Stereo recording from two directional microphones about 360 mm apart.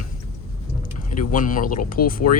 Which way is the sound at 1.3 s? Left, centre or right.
Left.